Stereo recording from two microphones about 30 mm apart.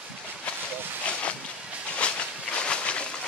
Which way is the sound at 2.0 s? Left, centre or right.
Left.